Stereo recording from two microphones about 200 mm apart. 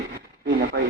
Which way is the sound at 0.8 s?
60° right (ahead or behind).